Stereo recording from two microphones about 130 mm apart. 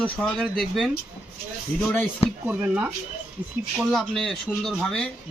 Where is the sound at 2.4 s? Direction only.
10° right (ahead or behind).